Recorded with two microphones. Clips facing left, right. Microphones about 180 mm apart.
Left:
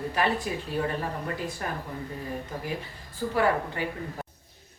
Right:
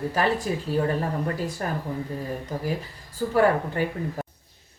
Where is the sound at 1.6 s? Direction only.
40° right (ahead or behind).